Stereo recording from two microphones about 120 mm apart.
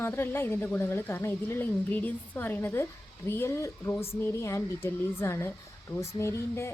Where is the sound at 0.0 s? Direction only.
20° left (ahead or behind).